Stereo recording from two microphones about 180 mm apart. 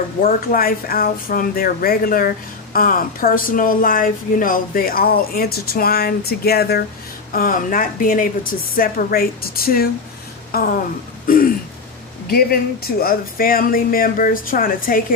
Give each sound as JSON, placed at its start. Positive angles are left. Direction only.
{"t": 0.2, "sound": "a woman's voice", "side_deg": 55}
{"t": 11.3, "sound": "throat clearing", "side_deg": 50}
{"t": 12.3, "sound": "a woman's voice", "side_deg": 55}